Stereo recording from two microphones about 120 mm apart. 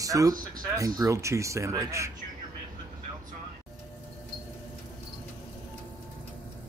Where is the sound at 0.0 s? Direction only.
30° right (ahead or behind).